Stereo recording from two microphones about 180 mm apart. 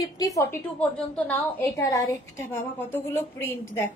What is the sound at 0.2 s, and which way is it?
Speech, 20° left (ahead or behind).